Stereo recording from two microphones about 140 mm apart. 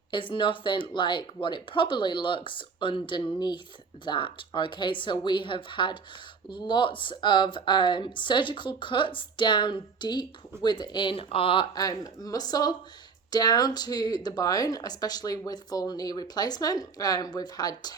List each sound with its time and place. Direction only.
0.1 s speech: 35° left (ahead or behind)
11.7 s speech: 25° left (ahead or behind)